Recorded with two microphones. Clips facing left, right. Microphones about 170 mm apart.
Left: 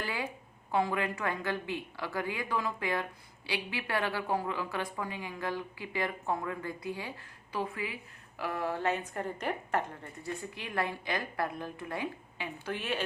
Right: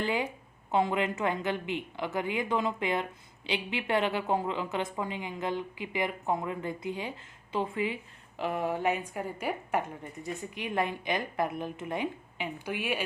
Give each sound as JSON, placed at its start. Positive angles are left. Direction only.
{"t": 0.0, "sound": "a woman's voice", "side_deg": -20}